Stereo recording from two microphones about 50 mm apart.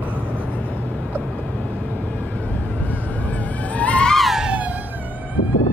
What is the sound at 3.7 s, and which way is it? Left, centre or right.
Music, left.